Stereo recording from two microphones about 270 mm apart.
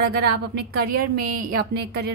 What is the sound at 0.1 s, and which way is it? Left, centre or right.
A woman's voice, right.